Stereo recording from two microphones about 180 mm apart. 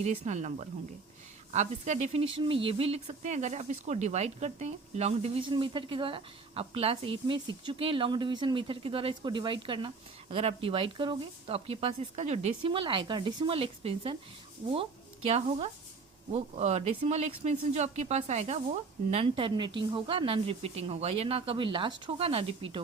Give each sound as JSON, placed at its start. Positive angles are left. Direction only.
{"t": 0.0, "sound": "speech", "side_deg": -40}
{"t": 1.5, "sound": "speech", "side_deg": -40}